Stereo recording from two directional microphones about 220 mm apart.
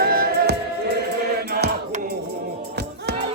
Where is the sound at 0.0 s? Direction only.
45° right (ahead or behind).